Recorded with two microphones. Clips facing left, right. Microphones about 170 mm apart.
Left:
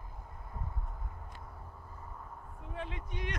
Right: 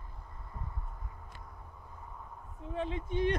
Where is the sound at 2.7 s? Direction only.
25° right (ahead or behind).